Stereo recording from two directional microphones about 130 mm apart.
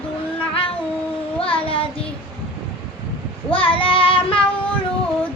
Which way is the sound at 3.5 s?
45° left (ahead or behind).